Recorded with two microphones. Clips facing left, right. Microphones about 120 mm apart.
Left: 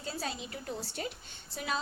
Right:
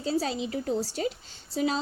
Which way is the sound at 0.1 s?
35° right (ahead or behind).